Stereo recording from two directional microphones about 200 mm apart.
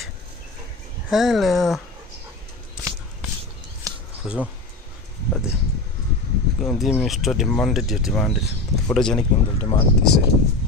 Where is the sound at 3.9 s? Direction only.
15° right (ahead or behind).